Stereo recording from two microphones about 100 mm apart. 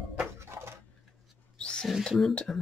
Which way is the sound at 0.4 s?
25° right (ahead or behind).